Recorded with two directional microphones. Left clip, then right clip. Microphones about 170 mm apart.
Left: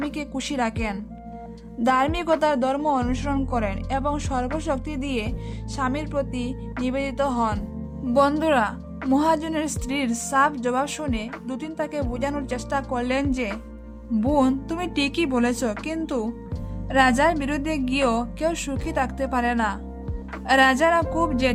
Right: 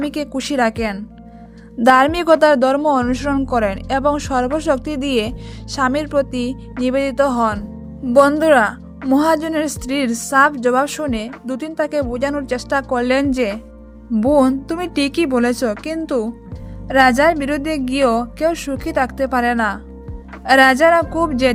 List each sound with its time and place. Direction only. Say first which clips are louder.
0.1 s a woman's voice: right 8 dB; 40° right (ahead or behind)